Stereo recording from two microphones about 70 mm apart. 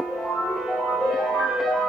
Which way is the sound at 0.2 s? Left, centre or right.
Centre.